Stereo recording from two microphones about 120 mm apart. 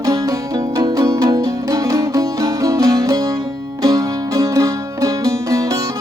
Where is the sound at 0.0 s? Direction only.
30° right (ahead or behind).